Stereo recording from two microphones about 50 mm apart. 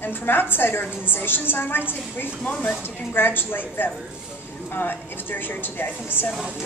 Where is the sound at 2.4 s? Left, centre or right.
Left.